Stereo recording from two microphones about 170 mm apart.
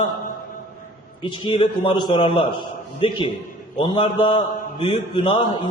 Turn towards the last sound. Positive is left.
turn(degrees=25)  # may be behind; listen again after turning